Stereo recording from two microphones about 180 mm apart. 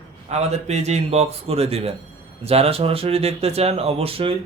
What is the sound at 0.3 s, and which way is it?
Speech, 35° right (ahead or behind).